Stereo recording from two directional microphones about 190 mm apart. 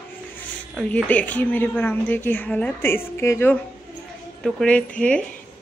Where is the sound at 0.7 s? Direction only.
5° left (ahead or behind).